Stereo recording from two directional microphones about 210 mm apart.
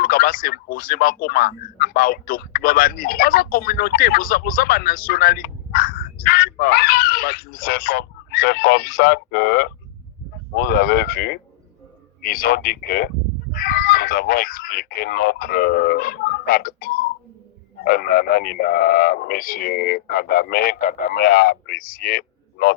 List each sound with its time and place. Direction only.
0.0 s speech: 45° left (ahead or behind)